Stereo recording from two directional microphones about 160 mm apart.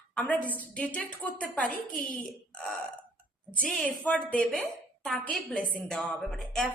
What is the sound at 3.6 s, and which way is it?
A woman's voice, 5° left (ahead or behind).